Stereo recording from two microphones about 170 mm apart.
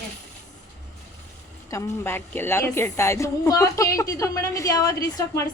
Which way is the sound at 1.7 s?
15° left (ahead or behind).